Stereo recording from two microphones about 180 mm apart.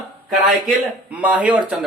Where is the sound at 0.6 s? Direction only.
5° right (ahead or behind).